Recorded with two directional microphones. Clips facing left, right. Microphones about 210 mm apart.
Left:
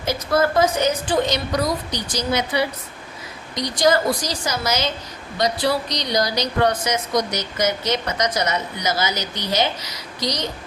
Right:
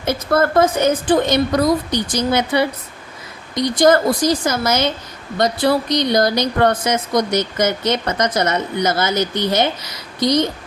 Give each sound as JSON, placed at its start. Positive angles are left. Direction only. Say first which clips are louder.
{"t": 0.0, "sound": "speech", "louder": "right 3 dB", "side_deg": -55}